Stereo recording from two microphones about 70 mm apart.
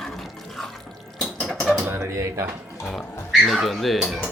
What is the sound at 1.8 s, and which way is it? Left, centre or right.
Speech, right.